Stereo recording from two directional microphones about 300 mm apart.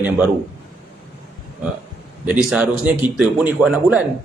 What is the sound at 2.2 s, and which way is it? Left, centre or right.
Speech, centre.